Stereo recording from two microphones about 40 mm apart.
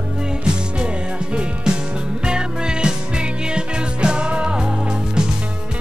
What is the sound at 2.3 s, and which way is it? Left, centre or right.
Music, right.